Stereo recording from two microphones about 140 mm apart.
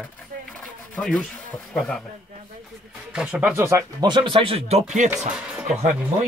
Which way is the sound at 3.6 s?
20° right (ahead or behind).